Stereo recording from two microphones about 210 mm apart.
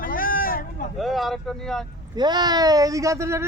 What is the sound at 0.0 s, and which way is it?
Hubbub, 40° left (ahead or behind).